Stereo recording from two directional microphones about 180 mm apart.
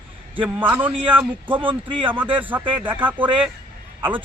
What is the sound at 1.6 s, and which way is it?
Speech, 30° right (ahead or behind).